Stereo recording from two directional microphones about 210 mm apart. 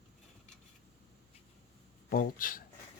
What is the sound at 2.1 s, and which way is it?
Speech, 40° left (ahead or behind).